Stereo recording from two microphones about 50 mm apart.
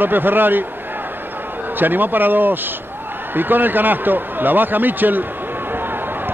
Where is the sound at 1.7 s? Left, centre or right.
Right.